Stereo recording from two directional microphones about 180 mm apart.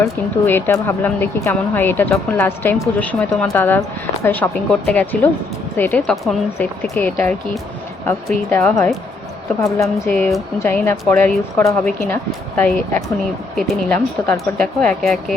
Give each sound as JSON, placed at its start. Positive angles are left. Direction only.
{"t": 0.0, "sound": "speech", "side_deg": 15}